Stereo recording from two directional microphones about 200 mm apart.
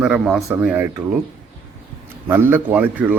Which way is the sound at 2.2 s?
10° right (ahead or behind).